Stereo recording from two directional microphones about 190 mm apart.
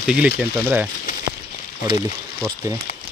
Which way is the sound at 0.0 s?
5° right (ahead or behind).